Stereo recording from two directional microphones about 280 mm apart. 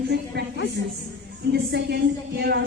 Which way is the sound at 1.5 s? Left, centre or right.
Right.